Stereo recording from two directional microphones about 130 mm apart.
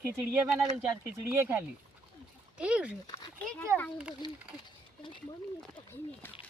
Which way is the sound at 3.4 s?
10° left (ahead or behind).